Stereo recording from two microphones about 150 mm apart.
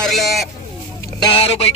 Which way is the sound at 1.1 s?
35° left (ahead or behind).